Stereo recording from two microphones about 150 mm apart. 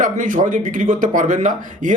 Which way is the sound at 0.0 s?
60° right (ahead or behind).